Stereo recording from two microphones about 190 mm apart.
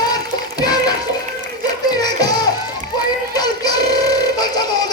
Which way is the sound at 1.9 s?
20° left (ahead or behind).